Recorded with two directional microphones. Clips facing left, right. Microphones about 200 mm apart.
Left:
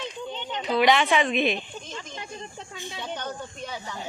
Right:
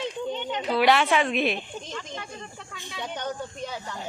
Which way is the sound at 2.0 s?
20° left (ahead or behind).